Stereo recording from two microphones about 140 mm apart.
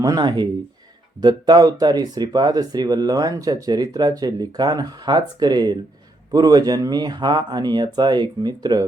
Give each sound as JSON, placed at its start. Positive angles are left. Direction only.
{"t": 0.0, "sound": "speech", "side_deg": -30}